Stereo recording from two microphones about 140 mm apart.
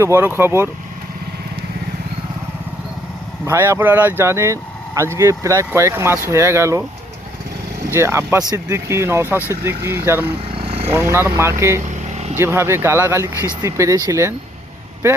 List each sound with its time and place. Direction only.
0.0 s speech: 15° right (ahead or behind)
3.4 s speech: 20° right (ahead or behind)
7.9 s speech: 20° right (ahead or behind)
10.5 s vehicle: 45° right (ahead or behind)
10.9 s speech: 20° right (ahead or behind)
12.0 s vehicle: 55° right (ahead or behind)
12.4 s speech: 20° right (ahead or behind)